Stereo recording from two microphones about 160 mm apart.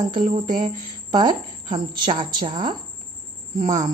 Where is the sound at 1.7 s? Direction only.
30° right (ahead or behind).